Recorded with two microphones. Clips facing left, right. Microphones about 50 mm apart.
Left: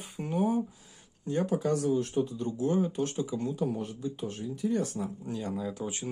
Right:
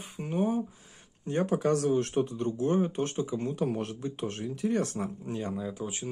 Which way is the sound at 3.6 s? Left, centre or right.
Right.